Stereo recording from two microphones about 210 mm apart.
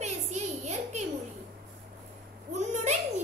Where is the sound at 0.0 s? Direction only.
30° right (ahead or behind).